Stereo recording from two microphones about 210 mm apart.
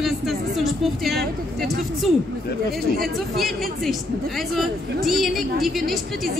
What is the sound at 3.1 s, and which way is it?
Speech, centre (ahead or behind).